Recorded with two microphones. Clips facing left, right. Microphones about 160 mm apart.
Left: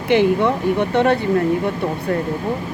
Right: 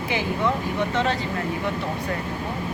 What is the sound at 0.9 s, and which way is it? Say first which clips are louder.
Speech: left 8 dB; 60° left (ahead or behind).